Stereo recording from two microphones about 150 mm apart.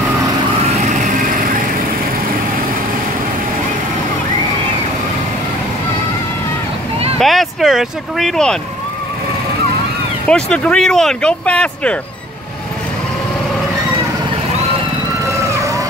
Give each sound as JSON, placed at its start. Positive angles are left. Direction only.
{"t": 0.8, "sound": "light engine", "side_deg": -60}
{"t": 7.2, "sound": "speech", "side_deg": 0}
{"t": 10.2, "sound": "speech", "side_deg": 5}
{"t": 15.2, "sound": "vehicle", "side_deg": -20}